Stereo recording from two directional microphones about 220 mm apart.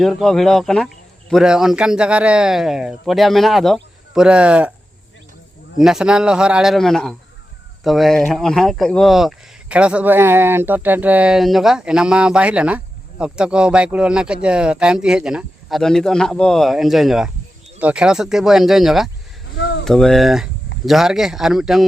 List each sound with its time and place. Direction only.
0.0 s speech: centre (ahead or behind)
5.8 s speech: centre (ahead or behind)